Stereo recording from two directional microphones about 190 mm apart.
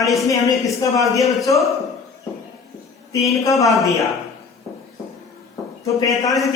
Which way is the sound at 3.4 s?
15° left (ahead or behind).